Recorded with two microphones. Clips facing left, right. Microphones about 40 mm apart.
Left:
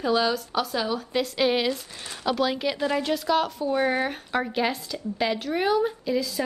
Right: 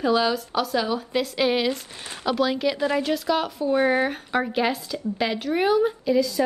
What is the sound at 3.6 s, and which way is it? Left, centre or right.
Speech, right.